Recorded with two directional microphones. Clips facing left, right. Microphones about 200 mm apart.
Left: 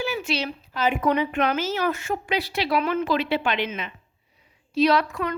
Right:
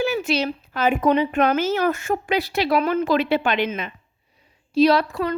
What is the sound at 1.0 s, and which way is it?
Speech, 30° right (ahead or behind).